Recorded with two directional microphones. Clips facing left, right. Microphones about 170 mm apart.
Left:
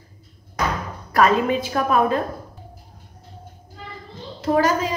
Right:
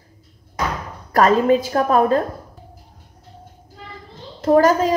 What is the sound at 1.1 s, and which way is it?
A woman's voice, 40° right (ahead or behind).